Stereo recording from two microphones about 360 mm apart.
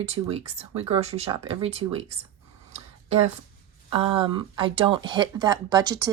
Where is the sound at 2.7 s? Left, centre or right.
Centre.